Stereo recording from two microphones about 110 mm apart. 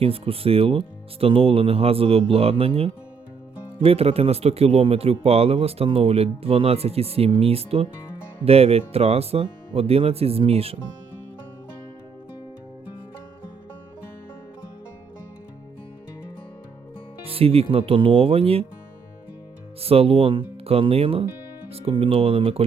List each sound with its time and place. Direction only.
0.0 s speech: 60° right (ahead or behind)
17.2 s speech: 60° right (ahead or behind)
19.8 s speech: 60° right (ahead or behind)